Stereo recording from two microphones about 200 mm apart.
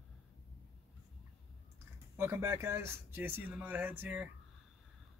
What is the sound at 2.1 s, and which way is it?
Speech, 10° right (ahead or behind).